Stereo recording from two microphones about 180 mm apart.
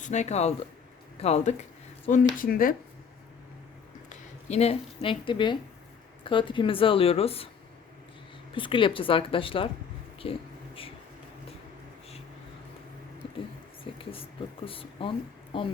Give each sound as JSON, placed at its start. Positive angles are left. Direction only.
{"t": 0.0, "sound": "speech", "side_deg": 40}
{"t": 2.0, "sound": "speech", "side_deg": 45}
{"t": 4.1, "sound": "speech", "side_deg": 35}
{"t": 8.5, "sound": "speech", "side_deg": 30}
{"t": 14.0, "sound": "speech", "side_deg": 30}